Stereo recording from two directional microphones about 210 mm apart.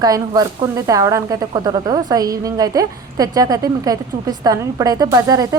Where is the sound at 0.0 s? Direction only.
20° right (ahead or behind).